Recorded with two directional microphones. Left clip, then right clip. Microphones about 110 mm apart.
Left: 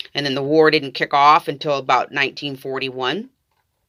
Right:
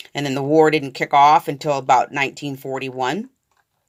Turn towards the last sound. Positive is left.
turn(degrees=-50)  # may be behind; listen again after turning